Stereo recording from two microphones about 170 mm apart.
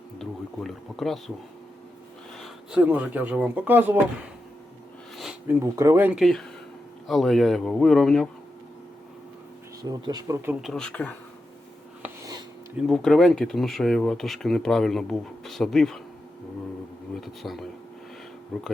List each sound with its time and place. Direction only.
0.2 s speech: centre (ahead or behind)
2.4 s speech: 5° right (ahead or behind)
9.8 s speech: 20° right (ahead or behind)
10.6 s speech: centre (ahead or behind)
12.0 s a sound: 20° right (ahead or behind)
12.7 s speech: centre (ahead or behind)
17.2 s speech: centre (ahead or behind)